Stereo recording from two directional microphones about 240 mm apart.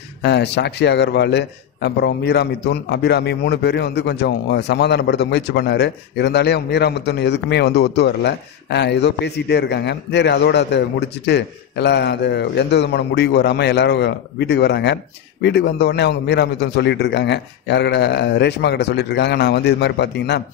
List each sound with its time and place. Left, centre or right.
0.2 s a man's voice: left